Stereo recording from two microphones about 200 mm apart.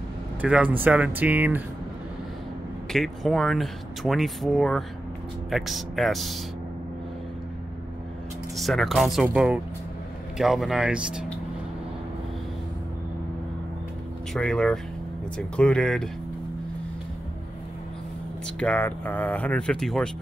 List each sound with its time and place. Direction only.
0.4 s speech: 5° right (ahead or behind)
2.9 s speech: centre (ahead or behind)
8.5 s speech: centre (ahead or behind)
14.3 s speech: centre (ahead or behind)
18.6 s speech: 5° left (ahead or behind)